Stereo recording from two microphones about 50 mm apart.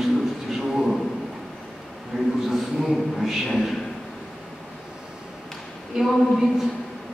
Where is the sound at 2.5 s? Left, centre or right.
Centre.